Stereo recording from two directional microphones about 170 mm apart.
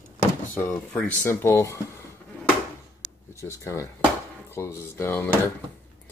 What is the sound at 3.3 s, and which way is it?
Speech, 15° left (ahead or behind).